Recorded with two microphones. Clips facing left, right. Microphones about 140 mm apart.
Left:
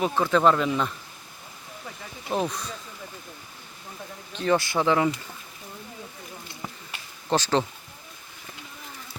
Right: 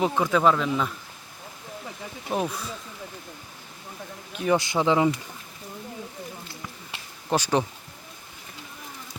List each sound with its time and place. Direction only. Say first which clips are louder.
0.0 s speech: even; 10° right (ahead or behind)
2.3 s speech: even; 5° right (ahead or behind)
4.3 s speech: even; 10° right (ahead or behind)
7.3 s speech: even; 10° right (ahead or behind)